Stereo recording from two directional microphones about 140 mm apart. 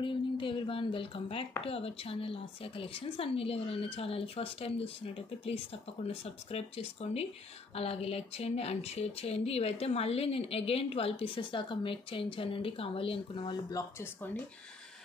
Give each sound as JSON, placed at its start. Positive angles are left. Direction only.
{"t": 0.0, "sound": "speech", "side_deg": 35}